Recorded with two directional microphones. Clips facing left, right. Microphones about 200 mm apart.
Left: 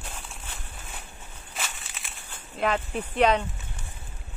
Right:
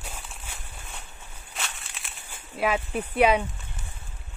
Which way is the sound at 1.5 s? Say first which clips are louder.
Left 1 dB; centre (ahead or behind).